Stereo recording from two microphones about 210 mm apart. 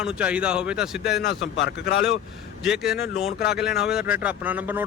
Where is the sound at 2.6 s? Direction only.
Centre (ahead or behind).